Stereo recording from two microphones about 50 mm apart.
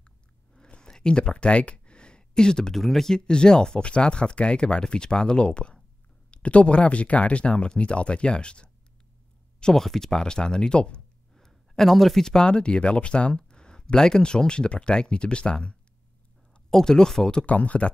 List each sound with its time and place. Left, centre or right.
0.6 s a sound: centre
2.8 s speech: centre
17.5 s speech: left